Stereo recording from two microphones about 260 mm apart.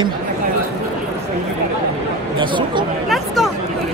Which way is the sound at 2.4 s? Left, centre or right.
Centre.